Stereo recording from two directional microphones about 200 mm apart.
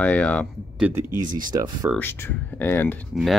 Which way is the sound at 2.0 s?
10° left (ahead or behind).